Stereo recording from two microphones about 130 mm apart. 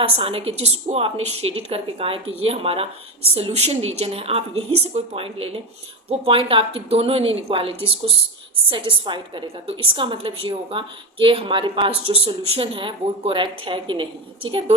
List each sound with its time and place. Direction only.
0.0 s a woman's voice: 45° right (ahead or behind)